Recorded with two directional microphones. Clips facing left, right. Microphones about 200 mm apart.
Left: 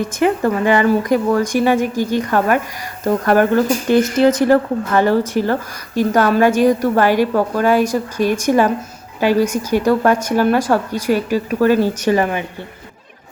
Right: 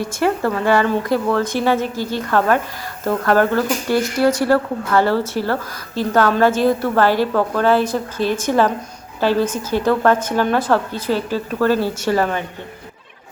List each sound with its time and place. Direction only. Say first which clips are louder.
0.0 s a woman's voice: left 3 dB; 20° left (ahead or behind)